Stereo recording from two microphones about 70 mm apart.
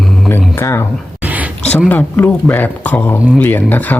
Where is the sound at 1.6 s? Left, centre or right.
Left.